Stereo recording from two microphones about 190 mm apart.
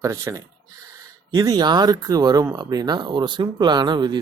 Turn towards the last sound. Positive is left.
turn(degrees=-25)  # may be behind; listen again after turning